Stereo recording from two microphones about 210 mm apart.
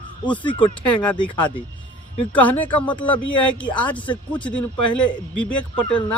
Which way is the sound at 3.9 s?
25° left (ahead or behind).